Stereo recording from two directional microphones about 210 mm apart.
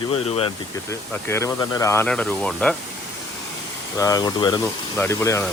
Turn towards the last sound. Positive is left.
turn(degrees=15)  # may be behind; listen again after turning